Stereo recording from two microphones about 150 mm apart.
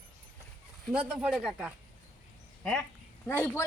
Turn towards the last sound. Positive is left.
turn(degrees=15)  # may be behind; listen again after turning